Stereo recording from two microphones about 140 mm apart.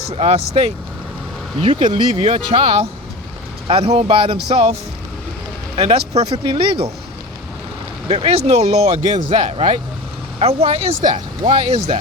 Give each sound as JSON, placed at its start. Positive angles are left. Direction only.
{"t": 0.2, "sound": "speech", "side_deg": -45}
{"t": 6.4, "sound": "speech", "side_deg": -35}
{"t": 8.0, "sound": "speech", "side_deg": -45}